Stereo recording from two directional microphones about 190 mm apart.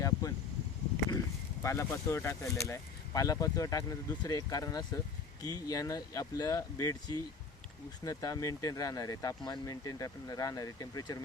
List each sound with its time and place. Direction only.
0.0 s vehicle: 20° left (ahead or behind)
1.6 s speech: 15° left (ahead or behind)